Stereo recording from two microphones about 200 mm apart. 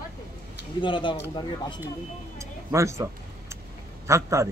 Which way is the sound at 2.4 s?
15° right (ahead or behind).